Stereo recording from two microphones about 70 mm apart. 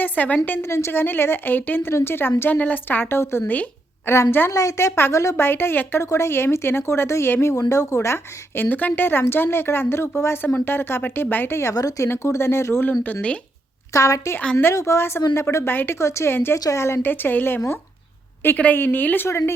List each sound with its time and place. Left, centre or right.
0.0 s a woman's voice: left
0.6 s a woman's voice: left
5.1 s a woman's voice: left
5.5 s a woman's voice: left
6.0 s a woman's voice: left
7.7 s a woman's voice: left
8.7 s a woman's voice: left
11.7 s speech: left
12.0 s a woman's voice: left
12.9 s a woman's voice: left
13.9 s a woman's voice: left
16.0 s a woman's voice: left
19.3 s a woman's voice: left